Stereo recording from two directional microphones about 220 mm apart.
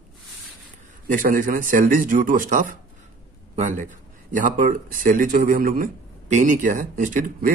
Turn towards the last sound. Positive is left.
turn(degrees=-40)  # may be behind; listen again after turning